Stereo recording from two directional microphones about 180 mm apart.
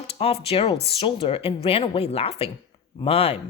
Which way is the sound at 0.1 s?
35° left (ahead or behind).